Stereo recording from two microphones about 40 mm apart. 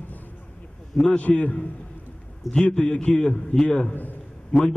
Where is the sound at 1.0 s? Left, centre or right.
Left.